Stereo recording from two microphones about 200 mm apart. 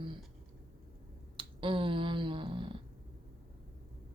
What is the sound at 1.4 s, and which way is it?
Finger snapping, 25° right (ahead or behind).